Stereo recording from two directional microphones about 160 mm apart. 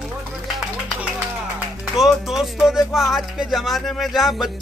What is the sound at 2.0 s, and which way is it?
Speech, centre (ahead or behind).